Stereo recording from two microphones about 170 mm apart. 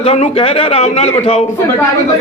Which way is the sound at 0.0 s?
35° left (ahead or behind).